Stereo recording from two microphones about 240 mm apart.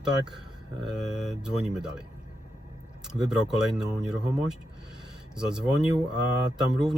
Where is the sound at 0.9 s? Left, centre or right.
Centre.